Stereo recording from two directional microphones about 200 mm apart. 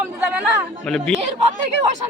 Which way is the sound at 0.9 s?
5° left (ahead or behind).